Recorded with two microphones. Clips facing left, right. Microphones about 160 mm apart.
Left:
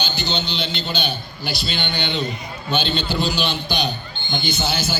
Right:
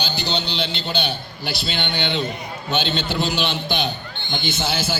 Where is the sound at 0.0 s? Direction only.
35° right (ahead or behind).